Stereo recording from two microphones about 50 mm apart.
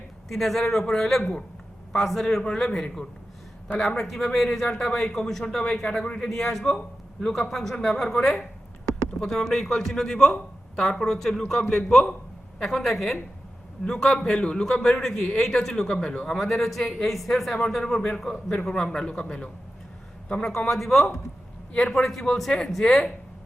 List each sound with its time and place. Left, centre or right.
0.3 s a man's voice: centre
3.8 s a man's voice: centre
16.4 s a man's voice: centre; by 19.5 s left
20.7 s a man's voice: centre
21.7 s a man's voice: centre